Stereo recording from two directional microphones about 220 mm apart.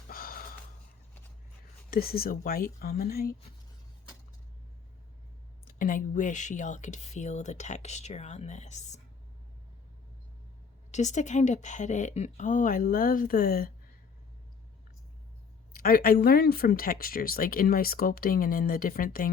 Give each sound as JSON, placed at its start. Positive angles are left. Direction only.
{"t": 0.1, "sound": "gasp", "side_deg": 40}
{"t": 1.9, "sound": "speech", "side_deg": 45}
{"t": 5.6, "sound": "speech", "side_deg": 40}
{"t": 10.9, "sound": "speech", "side_deg": 30}
{"t": 15.7, "sound": "speech", "side_deg": 45}